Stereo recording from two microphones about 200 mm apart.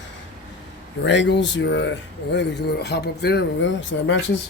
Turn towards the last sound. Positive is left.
turn(degrees=65)  # may be behind; listen again after turning